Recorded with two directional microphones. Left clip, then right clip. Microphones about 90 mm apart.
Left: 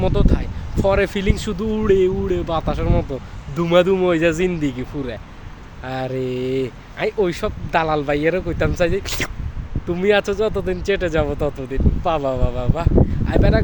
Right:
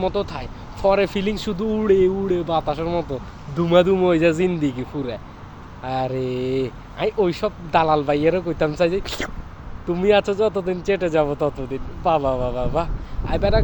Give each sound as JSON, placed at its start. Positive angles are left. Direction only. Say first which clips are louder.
{"t": 0.0, "sound": "speech", "louder": "left 2 dB", "side_deg": 40}